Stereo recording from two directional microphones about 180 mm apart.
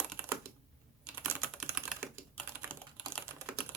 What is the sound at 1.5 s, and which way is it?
Typing, 5° right (ahead or behind).